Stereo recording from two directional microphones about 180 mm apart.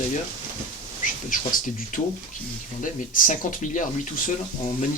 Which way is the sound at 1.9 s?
50° left (ahead or behind).